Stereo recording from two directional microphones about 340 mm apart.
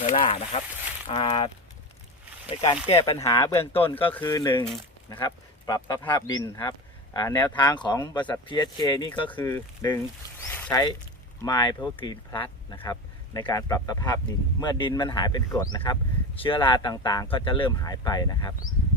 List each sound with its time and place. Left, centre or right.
0.0 s speech: left
2.8 s speech: centre
4.6 s speech: centre
5.1 s speech: centre
10.5 s a sound: centre
11.4 s speech: centre